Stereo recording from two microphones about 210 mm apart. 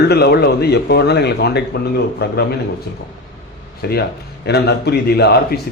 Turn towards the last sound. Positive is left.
turn(degrees=50)  # may be behind; listen again after turning